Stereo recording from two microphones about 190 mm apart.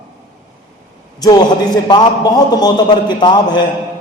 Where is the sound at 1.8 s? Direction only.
20° left (ahead or behind).